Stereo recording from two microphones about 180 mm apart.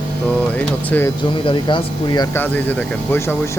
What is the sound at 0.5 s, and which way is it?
Speech, 10° left (ahead or behind).